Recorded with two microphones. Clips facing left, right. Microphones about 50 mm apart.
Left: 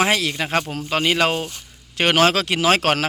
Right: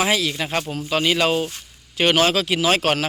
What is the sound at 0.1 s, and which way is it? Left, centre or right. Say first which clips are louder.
A man's voice: left 1 dB; left.